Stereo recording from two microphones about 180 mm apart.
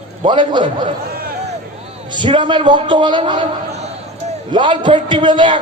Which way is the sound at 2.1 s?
25° right (ahead or behind).